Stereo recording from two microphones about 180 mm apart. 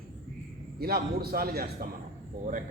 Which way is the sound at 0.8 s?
60° right (ahead or behind).